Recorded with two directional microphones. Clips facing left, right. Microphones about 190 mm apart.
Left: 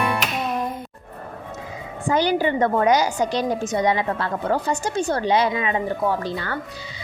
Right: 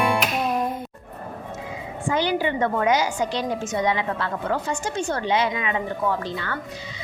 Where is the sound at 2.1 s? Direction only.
40° left (ahead or behind).